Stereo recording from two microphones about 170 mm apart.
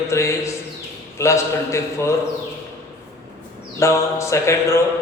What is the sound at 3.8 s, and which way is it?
A man's voice, 15° left (ahead or behind).